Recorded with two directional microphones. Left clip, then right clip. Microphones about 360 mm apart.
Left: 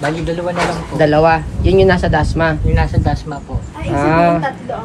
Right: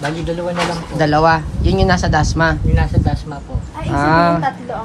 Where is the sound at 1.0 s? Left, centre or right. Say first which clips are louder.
Left 2 dB; centre.